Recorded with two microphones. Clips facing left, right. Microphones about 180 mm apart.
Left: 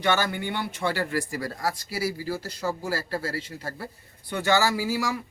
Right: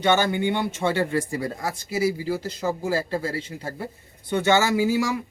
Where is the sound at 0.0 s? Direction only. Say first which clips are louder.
Right 5 dB; 20° right (ahead or behind).